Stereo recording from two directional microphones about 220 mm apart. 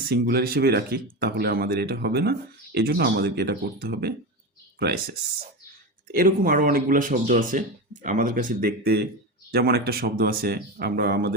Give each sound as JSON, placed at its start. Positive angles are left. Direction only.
{"t": 0.0, "sound": "speech", "side_deg": -45}